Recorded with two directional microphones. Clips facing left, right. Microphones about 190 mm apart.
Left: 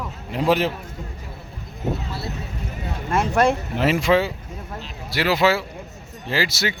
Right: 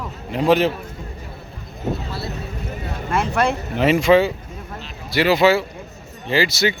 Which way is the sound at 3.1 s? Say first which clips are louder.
Left 1 dB; 45° left (ahead or behind).